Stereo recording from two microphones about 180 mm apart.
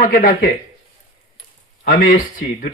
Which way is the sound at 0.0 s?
45° left (ahead or behind).